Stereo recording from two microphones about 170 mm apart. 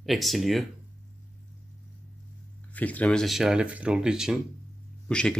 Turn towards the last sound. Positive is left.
turn(degrees=5)  # may be behind; listen again after turning